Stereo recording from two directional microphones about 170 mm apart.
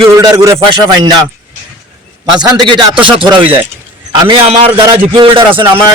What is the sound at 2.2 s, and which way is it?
Speech, 25° right (ahead or behind).